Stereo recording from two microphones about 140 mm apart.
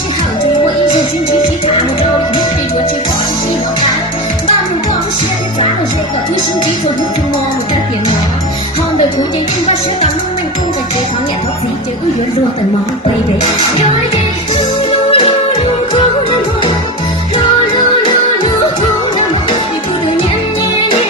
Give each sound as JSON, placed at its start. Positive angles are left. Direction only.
{"t": 15.1, "sound": "music", "side_deg": 40}